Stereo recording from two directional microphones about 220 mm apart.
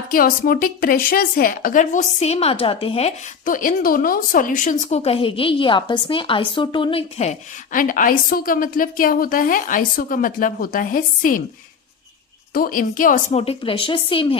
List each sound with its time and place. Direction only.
0.1 s a woman's voice: 40° left (ahead or behind); by 3.1 s 25° left (ahead or behind)
3.4 s a woman's voice: 40° left (ahead or behind)
12.5 s a woman's voice: 40° left (ahead or behind)
13.4 s speech: 25° left (ahead or behind)